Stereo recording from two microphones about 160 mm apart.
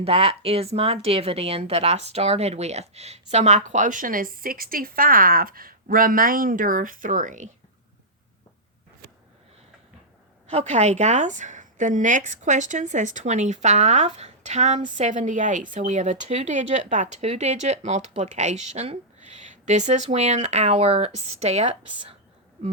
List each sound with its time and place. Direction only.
0.0 s speech: 40° right (ahead or behind)
10.5 s speech: 45° right (ahead or behind)